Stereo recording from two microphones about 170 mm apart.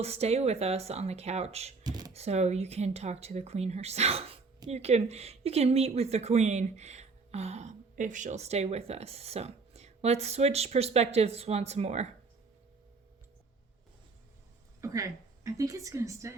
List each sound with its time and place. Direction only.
0.0 s speech: 40° right (ahead or behind)
1.8 s computer keyboard: 25° right (ahead or behind)
2.1 s speech: 40° right (ahead or behind)
14.8 s a woman's voice: 20° right (ahead or behind)